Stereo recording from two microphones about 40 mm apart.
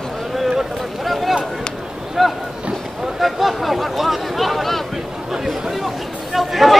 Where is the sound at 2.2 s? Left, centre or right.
Centre.